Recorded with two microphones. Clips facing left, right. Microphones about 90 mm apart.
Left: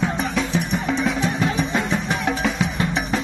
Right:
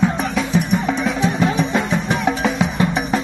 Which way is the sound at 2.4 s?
20° right (ahead or behind).